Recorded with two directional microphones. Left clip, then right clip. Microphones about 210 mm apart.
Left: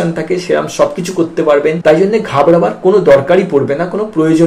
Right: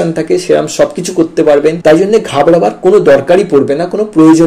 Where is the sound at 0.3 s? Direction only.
45° right (ahead or behind).